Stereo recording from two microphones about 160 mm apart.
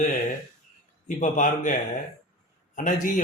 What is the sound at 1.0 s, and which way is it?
Speech, 55° left (ahead or behind).